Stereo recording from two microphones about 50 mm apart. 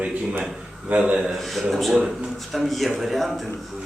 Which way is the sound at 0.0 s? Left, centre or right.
Right.